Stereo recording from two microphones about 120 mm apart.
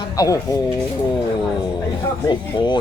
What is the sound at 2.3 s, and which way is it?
Speech, 40° left (ahead or behind).